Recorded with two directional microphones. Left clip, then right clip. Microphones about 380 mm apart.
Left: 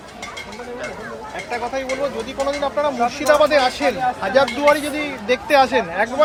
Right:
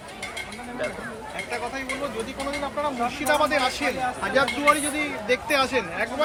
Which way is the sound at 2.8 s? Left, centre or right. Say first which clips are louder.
Left 8 dB; left.